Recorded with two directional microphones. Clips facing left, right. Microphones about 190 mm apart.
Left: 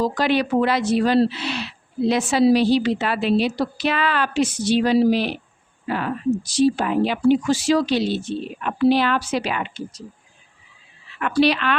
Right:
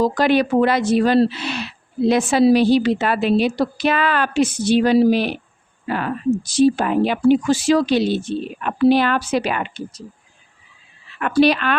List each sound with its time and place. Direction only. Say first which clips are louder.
0.0 s a woman's voice: right 4 dB; 50° right (ahead or behind)
11.2 s a woman's voice: right 3 dB; 45° right (ahead or behind)